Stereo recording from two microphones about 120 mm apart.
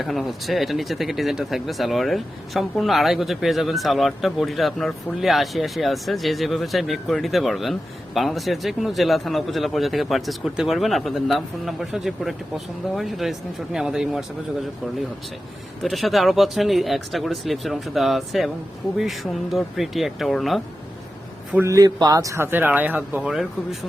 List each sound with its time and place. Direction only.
0.0 s speech: centre (ahead or behind)
15.8 s speech: centre (ahead or behind)
21.6 s speech: 25° right (ahead or behind); by 23.5 s 10° right (ahead or behind)